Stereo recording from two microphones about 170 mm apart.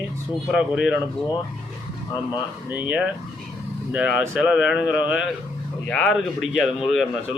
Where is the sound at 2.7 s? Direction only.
10° right (ahead or behind).